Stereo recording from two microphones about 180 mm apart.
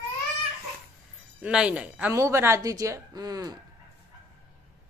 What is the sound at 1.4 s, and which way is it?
Speech, 5° right (ahead or behind).